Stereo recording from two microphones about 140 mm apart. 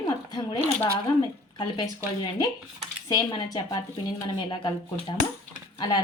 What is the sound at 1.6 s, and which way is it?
A woman's voice, 30° left (ahead or behind).